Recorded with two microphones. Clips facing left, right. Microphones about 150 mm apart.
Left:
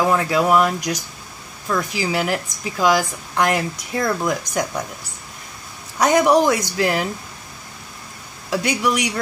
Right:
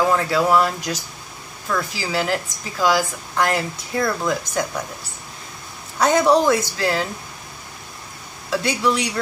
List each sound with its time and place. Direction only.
0.0 s a woman's voice: 15° left (ahead or behind)
5.9 s a woman's voice: 15° left (ahead or behind)
8.5 s a woman's voice: 15° left (ahead or behind)